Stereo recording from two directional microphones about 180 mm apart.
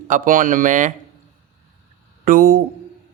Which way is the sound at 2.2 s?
50° right (ahead or behind).